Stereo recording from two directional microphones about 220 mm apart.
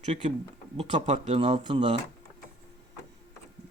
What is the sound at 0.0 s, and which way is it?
Speech, 30° right (ahead or behind).